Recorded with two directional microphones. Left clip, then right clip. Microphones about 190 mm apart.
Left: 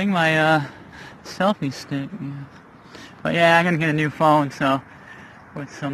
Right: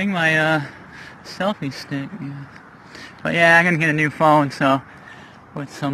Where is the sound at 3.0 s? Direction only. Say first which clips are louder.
Right 2 dB; centre (ahead or behind).